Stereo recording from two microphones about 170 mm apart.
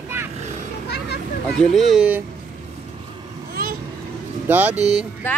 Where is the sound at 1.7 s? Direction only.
Centre (ahead or behind).